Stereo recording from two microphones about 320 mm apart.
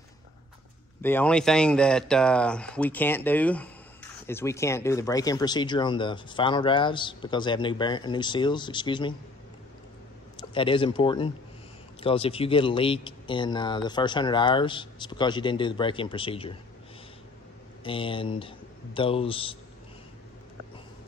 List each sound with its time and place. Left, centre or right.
1.0 s speech: centre
10.5 s speech: centre
17.8 s speech: centre